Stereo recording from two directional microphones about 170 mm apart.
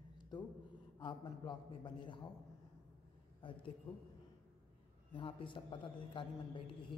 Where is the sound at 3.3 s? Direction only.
30° left (ahead or behind).